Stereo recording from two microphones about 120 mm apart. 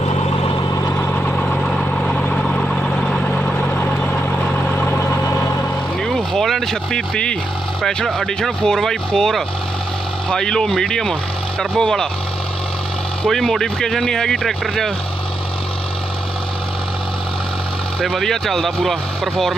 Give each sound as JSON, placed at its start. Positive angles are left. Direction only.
{"t": 0.1, "sound": "vehicle", "side_deg": 55}
{"t": 0.9, "sound": "vehicle", "side_deg": 15}
{"t": 6.0, "sound": "vehicle", "side_deg": 5}
{"t": 7.8, "sound": "speech", "side_deg": 5}
{"t": 13.2, "sound": "speech", "side_deg": 5}
{"t": 18.0, "sound": "speech", "side_deg": 5}